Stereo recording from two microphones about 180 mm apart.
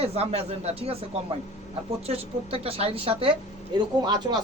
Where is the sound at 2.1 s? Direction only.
35° right (ahead or behind).